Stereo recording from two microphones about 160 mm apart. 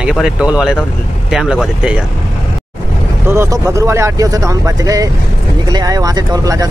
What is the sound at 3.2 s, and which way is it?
Speech, 15° right (ahead or behind).